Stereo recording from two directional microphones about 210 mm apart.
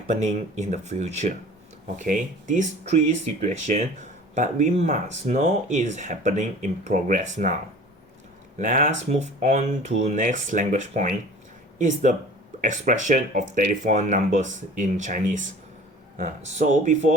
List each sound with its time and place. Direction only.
0.1 s speech: 35° right (ahead or behind)